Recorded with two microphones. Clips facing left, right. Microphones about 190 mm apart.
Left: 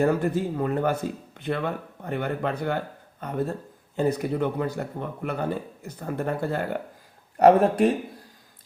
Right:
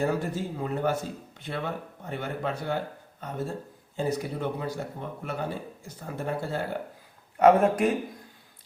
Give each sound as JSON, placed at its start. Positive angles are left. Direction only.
{"t": 0.0, "sound": "a man's voice", "side_deg": 60}
{"t": 7.3, "sound": "speech", "side_deg": 35}